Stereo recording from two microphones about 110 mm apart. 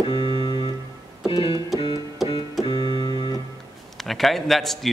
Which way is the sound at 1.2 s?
55° left (ahead or behind).